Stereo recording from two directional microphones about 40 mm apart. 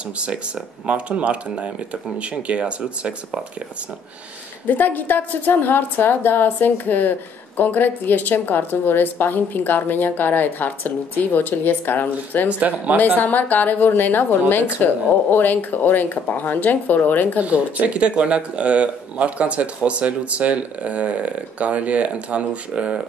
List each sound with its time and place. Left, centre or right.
0.8 s speech: right
4.6 s a woman's voice: left
12.4 s speech: right
12.9 s a woman's voice: left
17.4 s speech: right